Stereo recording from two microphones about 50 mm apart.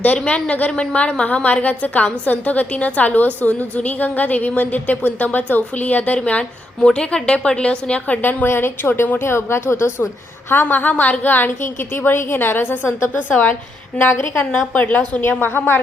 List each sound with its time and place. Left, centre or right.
0.3 s a woman's voice: left
6.7 s a woman's voice: centre; by 8.4 s left
8.4 s a woman's voice: left
9.2 s speech: left
10.5 s a woman's voice: left
11.6 s a woman's voice: left
14.0 s a woman's voice: left
14.7 s a woman's voice: left
15.4 s a woman's voice: left